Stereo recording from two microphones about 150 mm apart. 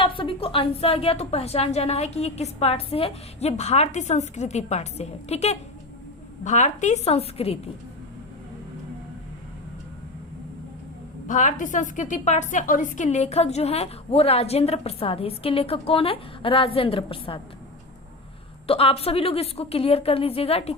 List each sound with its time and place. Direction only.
0.0 s a woman's voice: 35° left (ahead or behind)
11.3 s a woman's voice: 55° left (ahead or behind); by 17.4 s 35° left (ahead or behind)
18.7 s a woman's voice: 40° left (ahead or behind)